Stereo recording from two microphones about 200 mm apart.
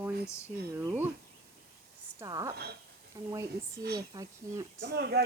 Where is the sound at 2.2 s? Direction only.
15° right (ahead or behind).